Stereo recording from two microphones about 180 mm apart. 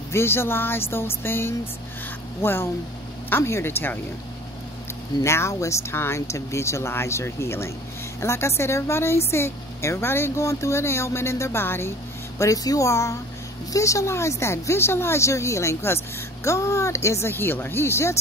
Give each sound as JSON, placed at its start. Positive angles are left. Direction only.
{"t": 0.1, "sound": "speech", "side_deg": 15}
{"t": 5.2, "sound": "speech", "side_deg": 15}